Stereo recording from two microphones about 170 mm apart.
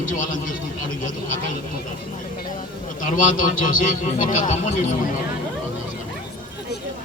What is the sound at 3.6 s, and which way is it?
A man's voice, 50° left (ahead or behind).